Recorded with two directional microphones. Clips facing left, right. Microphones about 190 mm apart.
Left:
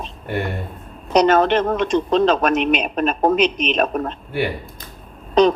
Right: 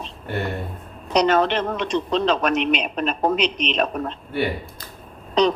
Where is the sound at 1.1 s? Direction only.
50° left (ahead or behind).